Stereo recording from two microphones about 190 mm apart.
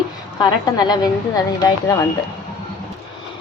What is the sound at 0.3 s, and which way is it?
Speech, 20° left (ahead or behind).